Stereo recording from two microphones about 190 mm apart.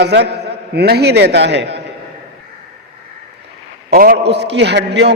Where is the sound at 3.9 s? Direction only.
50° right (ahead or behind).